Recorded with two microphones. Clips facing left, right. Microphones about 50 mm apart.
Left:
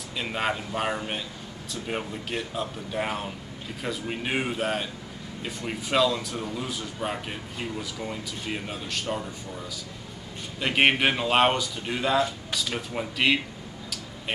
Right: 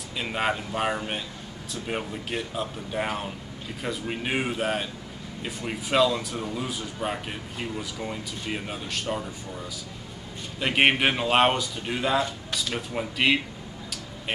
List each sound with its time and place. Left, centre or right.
0.2 s speech: centre
10.6 s speech: centre